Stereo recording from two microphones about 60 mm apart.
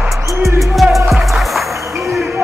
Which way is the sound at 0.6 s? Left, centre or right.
Centre.